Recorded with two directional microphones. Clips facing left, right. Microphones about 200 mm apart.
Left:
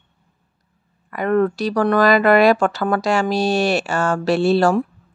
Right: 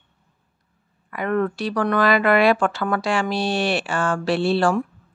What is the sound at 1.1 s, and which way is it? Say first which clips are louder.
Speech: left 5 dB; 40° left (ahead or behind).